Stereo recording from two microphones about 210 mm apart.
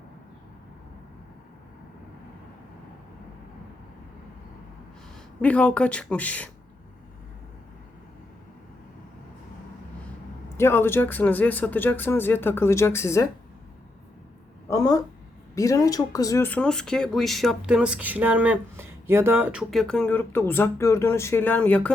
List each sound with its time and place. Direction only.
5.4 s speech: 5° left (ahead or behind)
10.6 s speech: 10° left (ahead or behind)
14.7 s a sound: 15° left (ahead or behind)
15.5 s speech: 15° left (ahead or behind)